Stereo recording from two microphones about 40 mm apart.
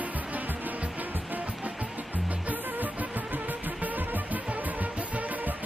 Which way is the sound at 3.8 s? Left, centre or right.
Right.